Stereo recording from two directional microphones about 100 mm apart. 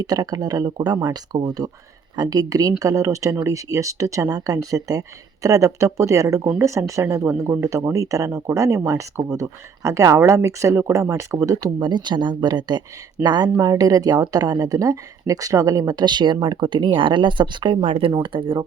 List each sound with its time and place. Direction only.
0.0 s speech: 40° right (ahead or behind)
17.8 s speech: 90° right
18.1 s speech: 55° right (ahead or behind)